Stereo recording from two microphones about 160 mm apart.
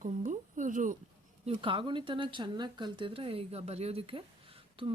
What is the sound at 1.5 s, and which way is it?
A woman's voice, 30° right (ahead or behind).